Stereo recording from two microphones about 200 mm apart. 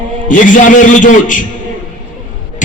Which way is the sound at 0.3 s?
40° left (ahead or behind).